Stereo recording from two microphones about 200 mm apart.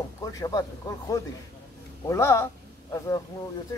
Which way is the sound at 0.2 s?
20° left (ahead or behind).